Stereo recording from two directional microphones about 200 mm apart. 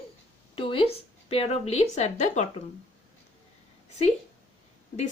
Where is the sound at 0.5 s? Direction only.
25° left (ahead or behind).